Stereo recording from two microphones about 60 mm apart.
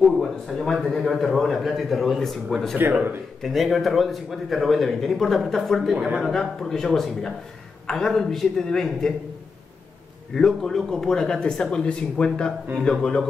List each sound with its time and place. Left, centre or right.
0.0 s a man's voice: centre
5.9 s speech: centre
6.2 s a man's voice: centre
10.3 s speech: centre